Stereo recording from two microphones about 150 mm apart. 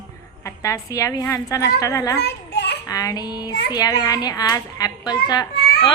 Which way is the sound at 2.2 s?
90° left.